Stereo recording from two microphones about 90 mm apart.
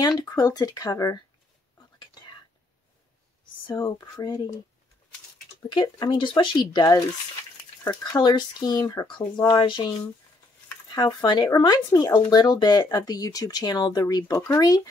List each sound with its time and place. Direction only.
0.3 s speech: 40° left (ahead or behind)
3.8 s speech: 45° left (ahead or behind)
5.7 s speech: 60° left (ahead or behind); by 14.9 s 45° left (ahead or behind)